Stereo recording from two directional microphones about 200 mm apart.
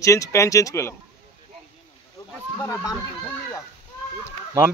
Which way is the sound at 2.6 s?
15° left (ahead or behind).